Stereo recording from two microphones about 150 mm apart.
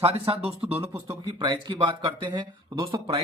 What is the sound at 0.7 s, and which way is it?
Speech, 15° right (ahead or behind).